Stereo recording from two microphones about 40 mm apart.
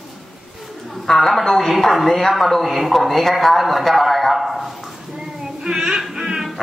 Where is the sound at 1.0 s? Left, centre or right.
Centre.